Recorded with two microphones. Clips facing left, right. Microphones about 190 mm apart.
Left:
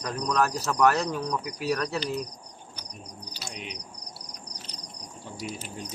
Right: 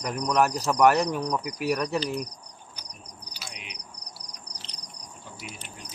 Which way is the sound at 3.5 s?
35° left (ahead or behind).